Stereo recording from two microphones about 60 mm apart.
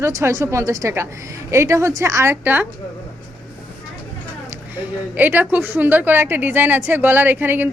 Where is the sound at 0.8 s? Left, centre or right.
Right.